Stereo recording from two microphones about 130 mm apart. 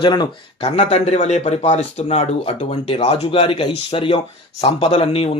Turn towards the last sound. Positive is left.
turn(degrees=50)  # may be behind; listen again after turning